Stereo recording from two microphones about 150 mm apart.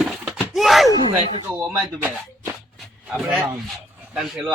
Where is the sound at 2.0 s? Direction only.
10° right (ahead or behind).